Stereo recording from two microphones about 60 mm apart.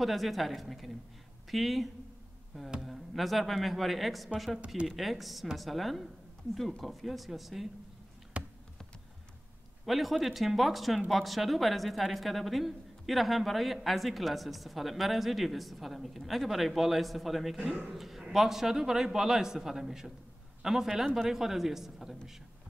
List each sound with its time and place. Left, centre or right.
0.0 s a woman's voice: centre
8.3 s computer keyboard: centre
9.8 s a woman's voice: centre